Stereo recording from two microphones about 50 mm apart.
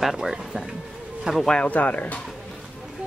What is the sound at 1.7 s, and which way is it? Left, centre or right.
Speech, left.